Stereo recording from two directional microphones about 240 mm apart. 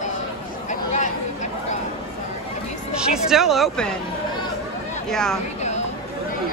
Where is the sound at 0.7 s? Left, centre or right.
Left.